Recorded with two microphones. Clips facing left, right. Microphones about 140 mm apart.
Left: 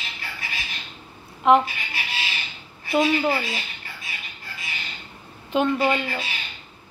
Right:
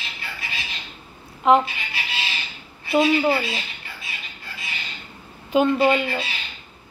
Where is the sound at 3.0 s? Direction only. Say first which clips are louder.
Right 2 dB; 25° right (ahead or behind).